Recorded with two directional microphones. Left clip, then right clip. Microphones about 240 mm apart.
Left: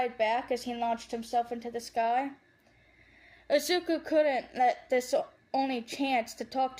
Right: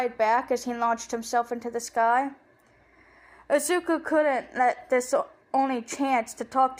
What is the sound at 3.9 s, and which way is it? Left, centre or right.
Speech, right.